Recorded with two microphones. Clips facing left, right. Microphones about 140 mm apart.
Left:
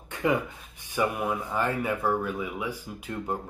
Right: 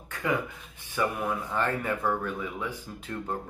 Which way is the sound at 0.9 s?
10° left (ahead or behind).